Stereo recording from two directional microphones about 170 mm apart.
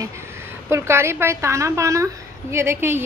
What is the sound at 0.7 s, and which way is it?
A woman's voice, 15° right (ahead or behind).